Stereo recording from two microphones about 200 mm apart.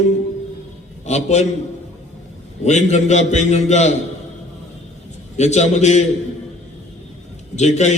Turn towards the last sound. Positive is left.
turn(degrees=35)  # may be behind; listen again after turning